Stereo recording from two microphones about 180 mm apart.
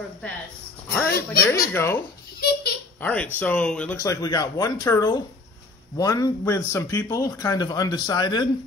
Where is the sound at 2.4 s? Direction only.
60° left (ahead or behind).